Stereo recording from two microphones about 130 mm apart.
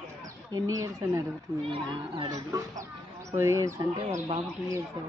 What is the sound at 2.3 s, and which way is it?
Speech, 25° right (ahead or behind).